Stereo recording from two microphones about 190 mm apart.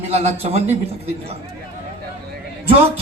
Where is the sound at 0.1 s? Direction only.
35° right (ahead or behind).